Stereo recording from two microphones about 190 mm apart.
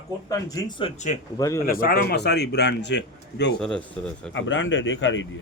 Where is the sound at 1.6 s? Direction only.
50° left (ahead or behind).